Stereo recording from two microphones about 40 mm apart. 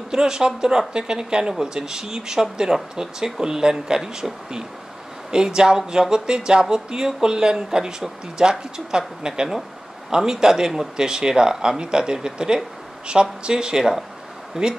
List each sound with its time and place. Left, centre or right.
0.1 s speech: centre